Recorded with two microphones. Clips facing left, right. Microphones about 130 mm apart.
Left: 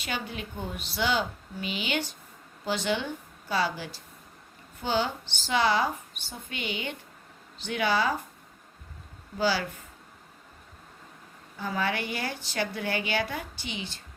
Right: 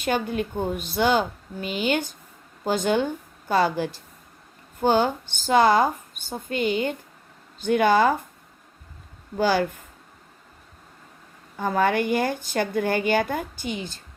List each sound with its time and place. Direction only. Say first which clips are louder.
0.0 s a woman's voice: right 10 dB; 50° right (ahead or behind)
9.4 s a woman's voice: right 6 dB; 50° right (ahead or behind)
11.5 s a woman's voice: right 8 dB; 50° right (ahead or behind)